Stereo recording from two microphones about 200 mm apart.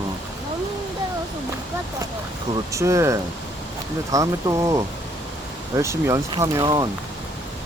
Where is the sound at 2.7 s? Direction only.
15° right (ahead or behind).